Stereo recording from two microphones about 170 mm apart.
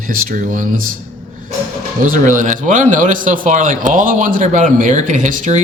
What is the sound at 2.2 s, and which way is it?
A man's voice, 50° right (ahead or behind).